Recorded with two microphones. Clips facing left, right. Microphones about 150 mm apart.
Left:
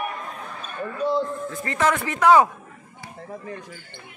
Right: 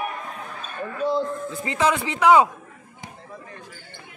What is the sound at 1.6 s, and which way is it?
Speech, 15° right (ahead or behind).